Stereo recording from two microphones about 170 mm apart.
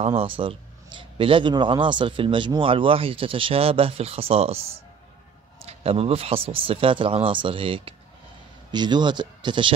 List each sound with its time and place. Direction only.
0.0 s a man's voice: 35° right (ahead or behind)